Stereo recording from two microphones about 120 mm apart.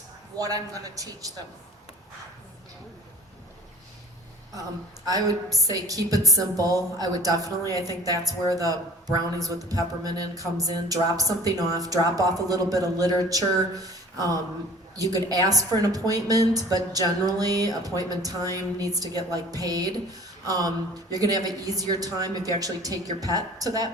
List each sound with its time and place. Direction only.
0.3 s speech: 30° right (ahead or behind)
5.5 s speech: 30° right (ahead or behind)